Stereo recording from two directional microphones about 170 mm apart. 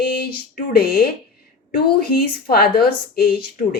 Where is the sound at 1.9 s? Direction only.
65° left (ahead or behind).